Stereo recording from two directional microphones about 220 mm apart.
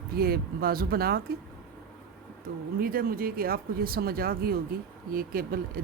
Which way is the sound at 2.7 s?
40° right (ahead or behind).